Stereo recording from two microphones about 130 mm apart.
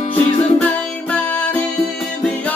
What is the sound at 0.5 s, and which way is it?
Music, 10° left (ahead or behind).